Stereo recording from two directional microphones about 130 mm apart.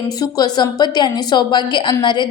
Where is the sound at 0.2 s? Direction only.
30° left (ahead or behind).